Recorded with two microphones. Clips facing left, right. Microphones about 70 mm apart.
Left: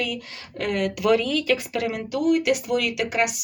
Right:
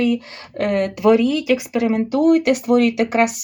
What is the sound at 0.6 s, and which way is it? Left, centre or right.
Speech, right.